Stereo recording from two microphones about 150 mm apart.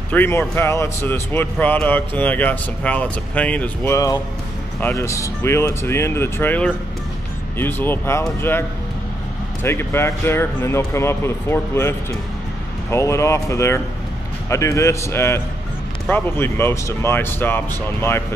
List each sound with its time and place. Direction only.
0.1 s speech: 15° left (ahead or behind)